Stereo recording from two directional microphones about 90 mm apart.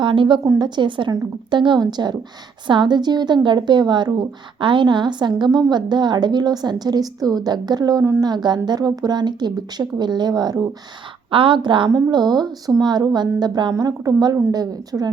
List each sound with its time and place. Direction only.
0.0 s a woman's voice: 65° right (ahead or behind); by 10.7 s 45° right (ahead or behind)
11.3 s a woman's voice: 75° right (ahead or behind)
11.9 s speech: 35° right (ahead or behind)
12.1 s a woman's voice: 50° right (ahead or behind)